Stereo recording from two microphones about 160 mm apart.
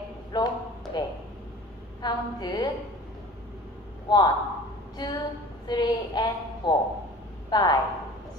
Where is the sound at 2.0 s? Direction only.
25° left (ahead or behind).